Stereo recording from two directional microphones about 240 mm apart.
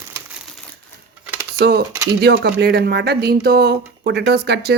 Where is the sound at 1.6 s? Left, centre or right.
Right.